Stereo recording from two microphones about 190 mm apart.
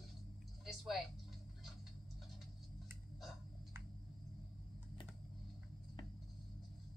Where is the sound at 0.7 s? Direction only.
Centre (ahead or behind).